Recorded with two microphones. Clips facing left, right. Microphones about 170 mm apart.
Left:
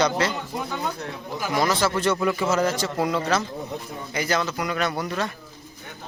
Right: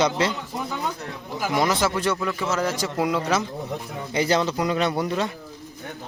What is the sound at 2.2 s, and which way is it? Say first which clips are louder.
A man's voice: left 3 dB; 5° left (ahead or behind).